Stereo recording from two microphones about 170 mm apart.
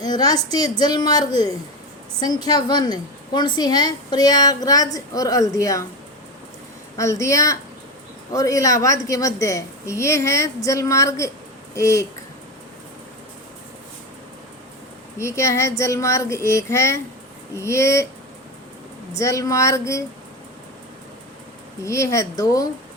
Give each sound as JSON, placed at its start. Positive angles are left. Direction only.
{"t": 0.0, "sound": "a woman's voice", "side_deg": 25}
{"t": 6.9, "sound": "a woman's voice", "side_deg": 20}
{"t": 15.2, "sound": "a woman's voice", "side_deg": 15}
{"t": 19.1, "sound": "a woman's voice", "side_deg": 20}
{"t": 21.8, "sound": "a woman's voice", "side_deg": 15}